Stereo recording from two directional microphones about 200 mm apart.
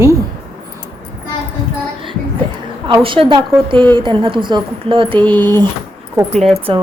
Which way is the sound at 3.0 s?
25° right (ahead or behind).